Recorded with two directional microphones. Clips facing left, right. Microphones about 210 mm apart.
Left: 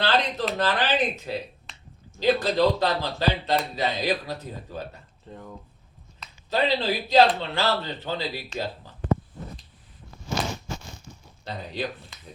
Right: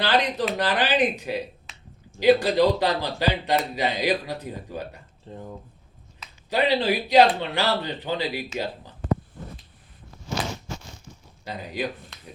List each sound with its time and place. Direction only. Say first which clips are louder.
0.0 s a man's voice: right 1 dB; 15° right (ahead or behind)
1.7 s finger snapping: even; 5° right (ahead or behind)
2.1 s a man's voice: right 4 dB; 15° right (ahead or behind)
5.3 s speech: right 3 dB; 25° right (ahead or behind)
6.5 s a man's voice: right 2 dB; 15° right (ahead or behind)
11.4 s a man's voice: right 1 dB; 10° right (ahead or behind)
12.1 s speech: right 2 dB; centre (ahead or behind)